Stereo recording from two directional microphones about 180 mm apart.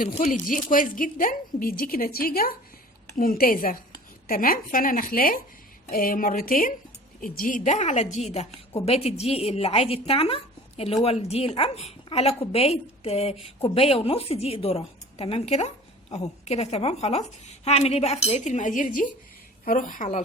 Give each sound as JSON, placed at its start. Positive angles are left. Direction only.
{"t": 0.1, "sound": "a woman's voice", "side_deg": 45}